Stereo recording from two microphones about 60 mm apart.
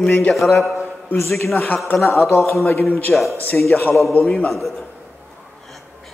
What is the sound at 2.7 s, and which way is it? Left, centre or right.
Speech, left.